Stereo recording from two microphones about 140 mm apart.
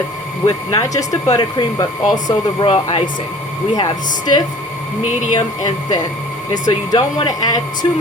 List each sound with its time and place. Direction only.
0.4 s speech: 25° left (ahead or behind); by 3.0 s 40° left (ahead or behind)
3.8 s speech: 30° left (ahead or behind)